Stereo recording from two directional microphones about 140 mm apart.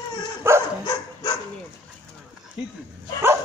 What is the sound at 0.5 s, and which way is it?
Dog, 20° right (ahead or behind).